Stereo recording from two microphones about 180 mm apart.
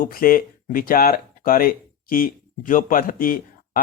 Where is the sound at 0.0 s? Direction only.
55° left (ahead or behind).